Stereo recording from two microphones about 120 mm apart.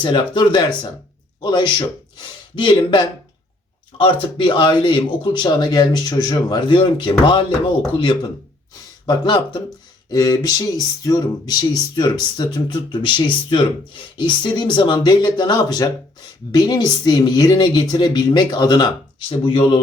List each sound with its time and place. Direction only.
0.0 s a man's voice: 40° left (ahead or behind)
9.0 s a man's voice: 40° left (ahead or behind)
19.3 s speech: 50° left (ahead or behind)